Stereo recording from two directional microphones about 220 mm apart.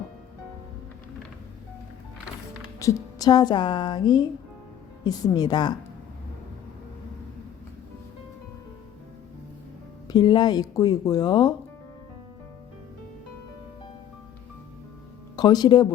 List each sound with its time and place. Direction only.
2.7 s speech: 15° left (ahead or behind)
10.1 s speech: 20° left (ahead or behind)
15.4 s speech: 20° left (ahead or behind)